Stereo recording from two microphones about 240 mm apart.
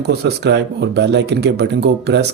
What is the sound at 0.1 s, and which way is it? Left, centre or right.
Speech, right.